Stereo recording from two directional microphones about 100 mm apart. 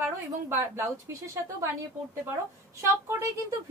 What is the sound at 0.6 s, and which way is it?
Speech, 30° right (ahead or behind).